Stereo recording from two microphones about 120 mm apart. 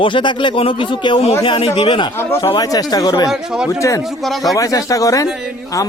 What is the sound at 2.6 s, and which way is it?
Speech, 30° left (ahead or behind).